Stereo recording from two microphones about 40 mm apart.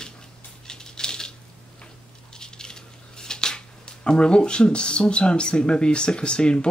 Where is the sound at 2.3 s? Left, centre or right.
Centre.